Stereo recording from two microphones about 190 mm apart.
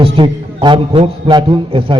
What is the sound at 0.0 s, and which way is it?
A man's voice, 25° right (ahead or behind).